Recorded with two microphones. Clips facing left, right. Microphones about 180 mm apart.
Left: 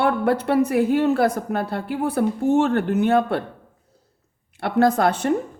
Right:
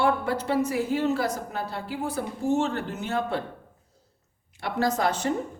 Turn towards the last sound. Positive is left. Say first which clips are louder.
# left 6 dB
turn(degrees=60)  # may be behind; listen again after turning